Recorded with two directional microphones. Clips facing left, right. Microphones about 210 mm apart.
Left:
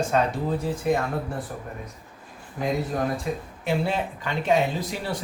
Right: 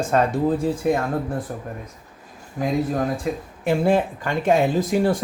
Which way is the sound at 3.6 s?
50° right (ahead or behind).